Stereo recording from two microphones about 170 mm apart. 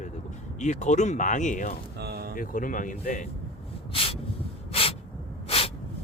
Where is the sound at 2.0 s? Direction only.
65° right (ahead or behind).